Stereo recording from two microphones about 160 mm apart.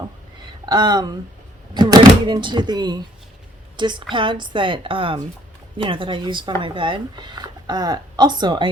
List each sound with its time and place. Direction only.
0.6 s a woman's voice: 25° right (ahead or behind)